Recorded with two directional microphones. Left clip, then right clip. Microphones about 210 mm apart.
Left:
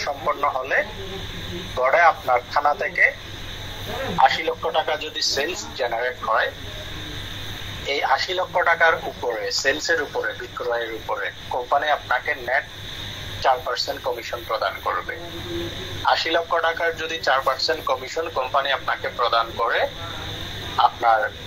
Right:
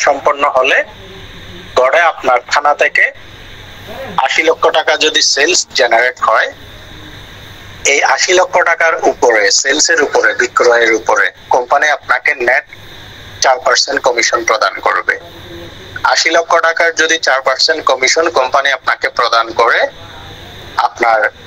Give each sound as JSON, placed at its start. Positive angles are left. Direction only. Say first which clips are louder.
{"t": 0.0, "sound": "speech", "louder": "right 12 dB", "side_deg": -50}
{"t": 4.2, "sound": "speech", "louder": "right 9 dB", "side_deg": -50}
{"t": 7.8, "sound": "speech", "louder": "right 11 dB", "side_deg": -50}
{"t": 16.1, "sound": "a man's voice", "louder": "right 10 dB", "side_deg": -50}